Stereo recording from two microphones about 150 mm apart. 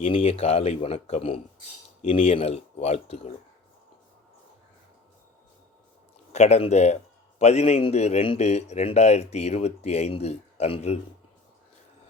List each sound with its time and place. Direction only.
0.0 s a man's voice: 40° left (ahead or behind)
6.3 s a man's voice: 50° left (ahead or behind)